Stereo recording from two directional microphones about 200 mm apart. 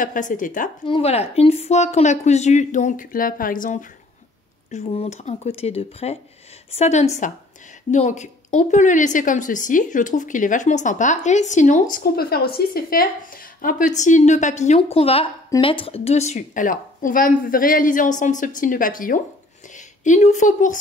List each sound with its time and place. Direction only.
0.0 s a woman's voice: 40° left (ahead or behind)
0.8 s a woman's voice: 30° left (ahead or behind)